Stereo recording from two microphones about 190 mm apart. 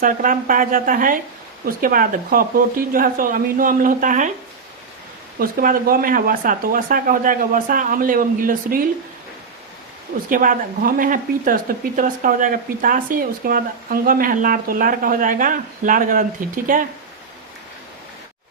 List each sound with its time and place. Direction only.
0.0 s speech: 45° right (ahead or behind)
5.4 s speech: 50° right (ahead or behind)
10.2 s speech: 45° right (ahead or behind)